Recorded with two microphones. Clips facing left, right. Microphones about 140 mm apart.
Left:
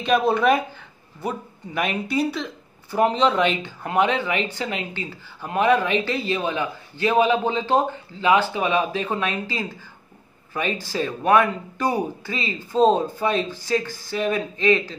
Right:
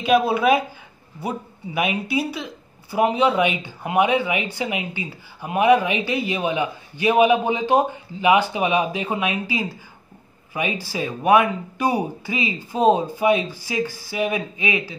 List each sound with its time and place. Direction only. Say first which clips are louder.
0.0 s speech: right 1 dB; 10° right (ahead or behind)